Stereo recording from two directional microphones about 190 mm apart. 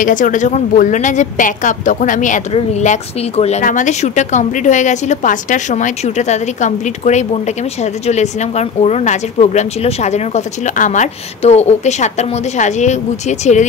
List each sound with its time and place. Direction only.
0.0 s a woman's voice: 45° left (ahead or behind)